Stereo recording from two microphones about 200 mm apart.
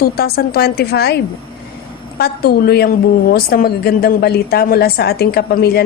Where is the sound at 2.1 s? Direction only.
50° left (ahead or behind).